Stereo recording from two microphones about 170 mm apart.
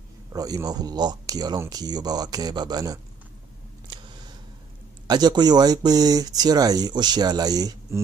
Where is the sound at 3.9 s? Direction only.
30° right (ahead or behind).